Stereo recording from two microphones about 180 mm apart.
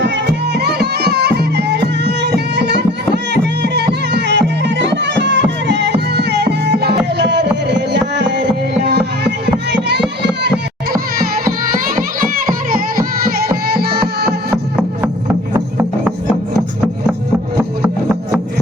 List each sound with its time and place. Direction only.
0.0 s music: 65° right (ahead or behind)
10.4 s children playing: 65° right (ahead or behind)
11.9 s music: 50° right (ahead or behind)
14.5 s music: 5° right (ahead or behind)